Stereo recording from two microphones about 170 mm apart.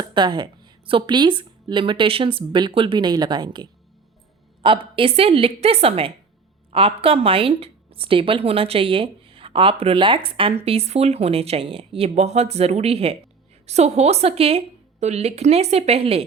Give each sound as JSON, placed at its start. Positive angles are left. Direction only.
{"t": 0.0, "sound": "a woman's voice", "side_deg": -25}